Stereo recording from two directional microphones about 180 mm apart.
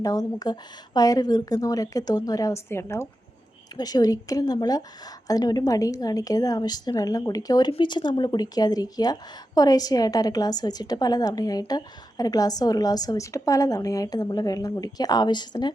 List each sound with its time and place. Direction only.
0.0 s a woman's voice: 20° left (ahead or behind)